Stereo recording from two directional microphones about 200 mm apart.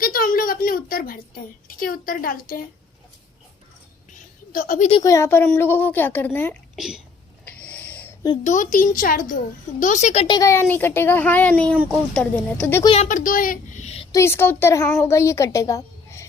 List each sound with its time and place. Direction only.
0.0 s a sound: 45° left (ahead or behind)
4.5 s a child's voice: 40° left (ahead or behind)
5.0 s a woman's voice: 15° left (ahead or behind)
6.7 s speech: centre (ahead or behind)
7.4 s snort: 5° left (ahead or behind)
8.4 s a child's voice: 40° left (ahead or behind); by 12.8 s 5° left (ahead or behind)
12.8 s speech: 30° left (ahead or behind)
13.1 s speech: 40° left (ahead or behind)
14.1 s a woman's voice: 15° left (ahead or behind)
14.8 s speech: 5° left (ahead or behind)
15.1 s a woman's voice: 15° left (ahead or behind)